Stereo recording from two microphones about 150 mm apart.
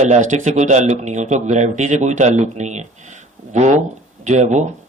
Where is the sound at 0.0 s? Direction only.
50° right (ahead or behind).